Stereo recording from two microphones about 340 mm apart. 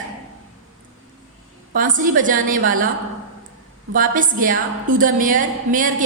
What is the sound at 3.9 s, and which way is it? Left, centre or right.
A woman's voice, right.